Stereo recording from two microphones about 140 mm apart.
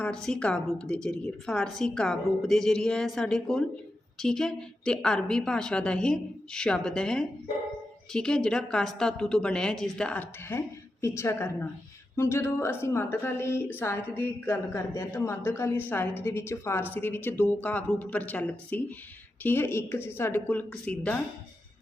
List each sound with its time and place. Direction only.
0.0 s a woman's voice: 5° left (ahead or behind)